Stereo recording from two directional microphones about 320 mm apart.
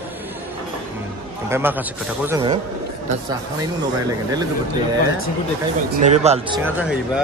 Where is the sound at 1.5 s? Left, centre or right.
Centre.